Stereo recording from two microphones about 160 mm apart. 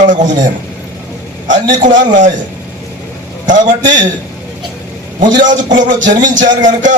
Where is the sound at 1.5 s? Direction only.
55° right (ahead or behind).